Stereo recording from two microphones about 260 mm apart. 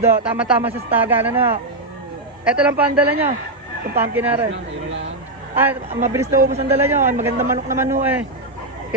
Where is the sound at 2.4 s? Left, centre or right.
Centre.